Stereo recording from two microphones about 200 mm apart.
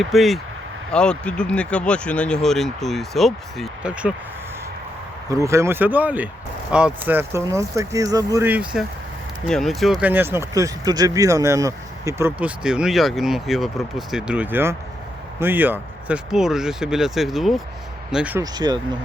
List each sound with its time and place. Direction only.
0.0 s speech: centre (ahead or behind)
5.3 s speech: 15° right (ahead or behind)
18.5 s speech: 20° right (ahead or behind)